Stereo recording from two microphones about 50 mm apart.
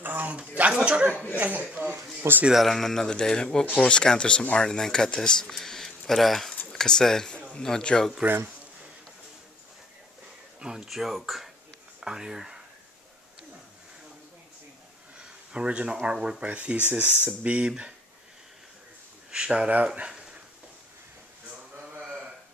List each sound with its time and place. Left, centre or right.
0.0 s a sound: right
0.7 s speech: right
1.4 s speech: right
2.2 s speech: right
2.7 s speech: centre
10.6 s speech: centre
12.0 s speech: centre
15.1 s speech: centre
19.3 s speech: centre